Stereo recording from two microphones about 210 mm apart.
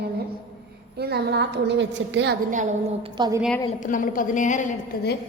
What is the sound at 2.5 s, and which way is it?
Speech, 35° right (ahead or behind).